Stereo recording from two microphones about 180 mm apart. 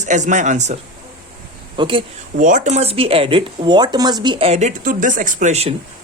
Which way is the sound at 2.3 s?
45° right (ahead or behind).